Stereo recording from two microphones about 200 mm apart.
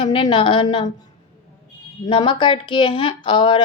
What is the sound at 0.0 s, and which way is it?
Speech, 25° left (ahead or behind).